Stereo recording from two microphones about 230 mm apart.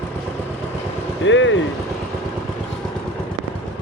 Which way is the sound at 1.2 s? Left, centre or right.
Left.